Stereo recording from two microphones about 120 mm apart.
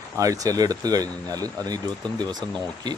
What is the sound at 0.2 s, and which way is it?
Speech, 30° right (ahead or behind).